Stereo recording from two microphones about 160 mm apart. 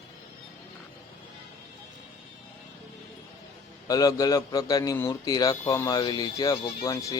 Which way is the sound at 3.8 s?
25° left (ahead or behind).